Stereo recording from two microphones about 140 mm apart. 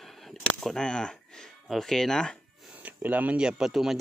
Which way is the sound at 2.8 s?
10° right (ahead or behind).